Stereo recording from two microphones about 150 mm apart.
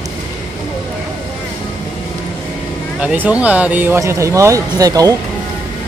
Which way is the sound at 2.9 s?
10° right (ahead or behind).